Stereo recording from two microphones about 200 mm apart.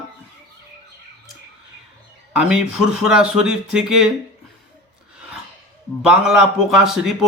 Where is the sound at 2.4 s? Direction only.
5° right (ahead or behind).